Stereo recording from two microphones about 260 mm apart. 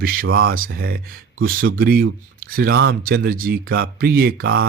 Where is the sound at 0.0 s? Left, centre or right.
Right.